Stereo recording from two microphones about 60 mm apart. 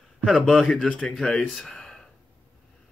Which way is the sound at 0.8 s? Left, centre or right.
Centre.